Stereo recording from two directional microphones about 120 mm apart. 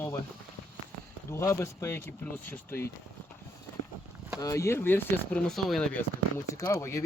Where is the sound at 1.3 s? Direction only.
25° left (ahead or behind).